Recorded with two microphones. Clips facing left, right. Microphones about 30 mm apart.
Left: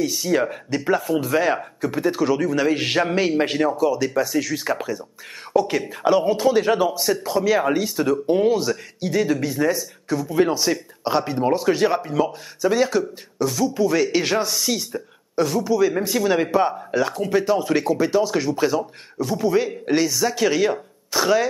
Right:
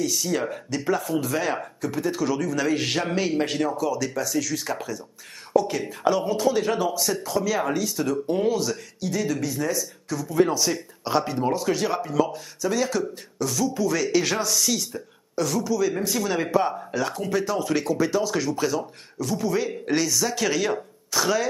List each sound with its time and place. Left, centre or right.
0.0 s speech: left